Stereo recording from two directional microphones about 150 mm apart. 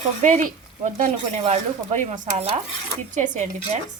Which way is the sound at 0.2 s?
55° right (ahead or behind).